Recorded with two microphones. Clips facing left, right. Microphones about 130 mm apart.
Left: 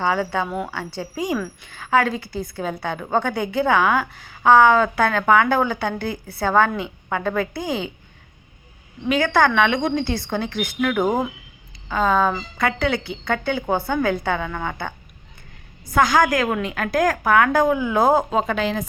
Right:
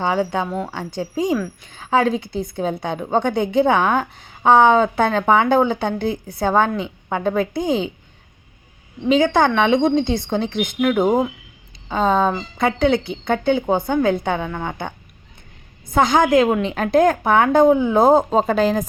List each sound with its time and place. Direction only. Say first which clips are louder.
0.0 s speech: right 2 dB; 20° right (ahead or behind)
0.4 s speech: right 2 dB; 5° left (ahead or behind)
0.7 s a woman's voice: right 3 dB; 15° right (ahead or behind)
9.0 s a woman's voice: right 3 dB; 20° right (ahead or behind); by 18.9 s 40° right (ahead or behind)